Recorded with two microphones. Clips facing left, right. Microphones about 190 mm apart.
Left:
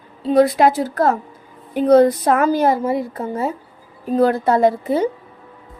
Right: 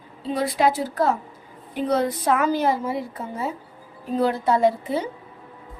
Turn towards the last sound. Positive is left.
turn(degrees=50)  # may be behind; listen again after turning